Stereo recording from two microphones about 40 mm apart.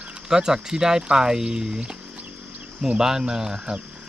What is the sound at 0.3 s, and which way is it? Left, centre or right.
Speech, centre.